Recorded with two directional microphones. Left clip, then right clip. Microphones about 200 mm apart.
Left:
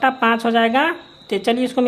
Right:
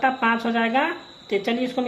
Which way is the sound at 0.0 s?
40° left (ahead or behind).